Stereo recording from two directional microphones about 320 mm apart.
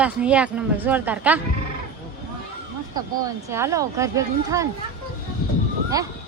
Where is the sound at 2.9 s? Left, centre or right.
Centre.